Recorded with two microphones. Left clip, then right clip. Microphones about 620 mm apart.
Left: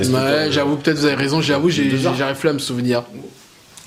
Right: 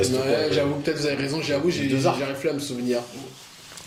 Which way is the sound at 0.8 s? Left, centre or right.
Left.